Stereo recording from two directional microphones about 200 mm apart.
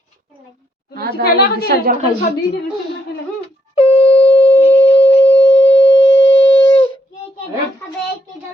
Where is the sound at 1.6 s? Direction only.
50° right (ahead or behind).